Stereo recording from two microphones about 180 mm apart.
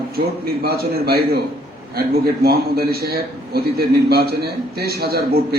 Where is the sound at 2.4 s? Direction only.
60° right (ahead or behind).